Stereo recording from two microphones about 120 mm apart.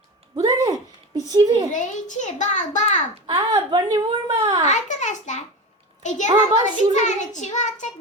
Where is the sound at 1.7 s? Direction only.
90° left.